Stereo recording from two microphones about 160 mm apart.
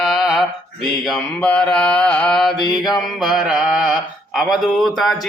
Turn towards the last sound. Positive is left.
turn(degrees=0)  # may be behind; listen again after turning